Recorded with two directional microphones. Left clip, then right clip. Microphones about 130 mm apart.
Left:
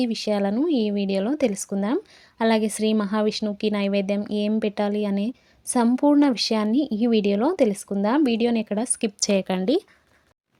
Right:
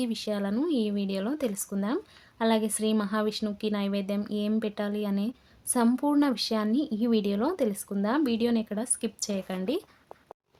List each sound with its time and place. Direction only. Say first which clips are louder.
0.0 s speech: left 7 dB; 45° left (ahead or behind); by 9.6 s 70° left (ahead or behind)
9.6 s speech: left 8 dB; 50° left (ahead or behind)